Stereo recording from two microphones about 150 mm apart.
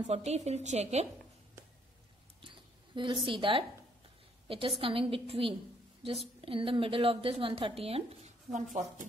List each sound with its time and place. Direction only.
0.0 s a woman's voice: 45° right (ahead or behind)
2.4 s a sound: 35° right (ahead or behind)
4.5 s a woman's voice: 35° right (ahead or behind)